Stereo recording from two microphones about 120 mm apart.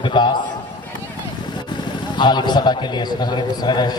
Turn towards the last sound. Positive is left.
turn(degrees=35)  # may be behind; listen again after turning